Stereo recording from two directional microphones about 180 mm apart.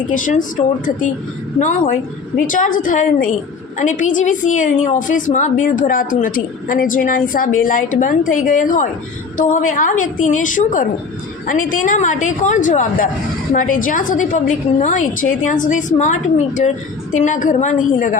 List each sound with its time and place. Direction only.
0.1 s a woman's voice: 45° left (ahead or behind)
17.2 s a woman's voice: 45° left (ahead or behind)